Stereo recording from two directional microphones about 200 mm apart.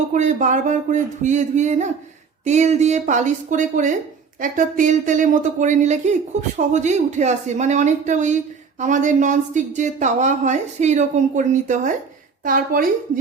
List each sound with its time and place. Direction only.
0.1 s a woman's voice: 40° right (ahead or behind)